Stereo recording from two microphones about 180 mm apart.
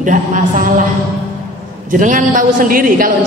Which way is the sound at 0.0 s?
45° right (ahead or behind).